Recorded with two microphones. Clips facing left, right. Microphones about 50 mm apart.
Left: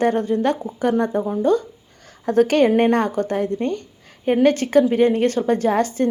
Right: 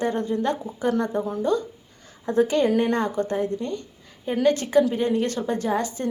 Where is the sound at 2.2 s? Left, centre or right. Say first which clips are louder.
Left 5 dB; left.